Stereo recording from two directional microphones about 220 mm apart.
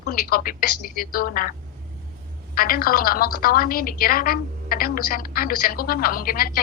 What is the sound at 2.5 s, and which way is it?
A woman's voice, 40° left (ahead or behind).